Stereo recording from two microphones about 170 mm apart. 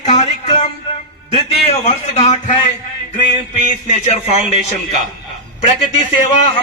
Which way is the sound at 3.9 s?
40° left (ahead or behind).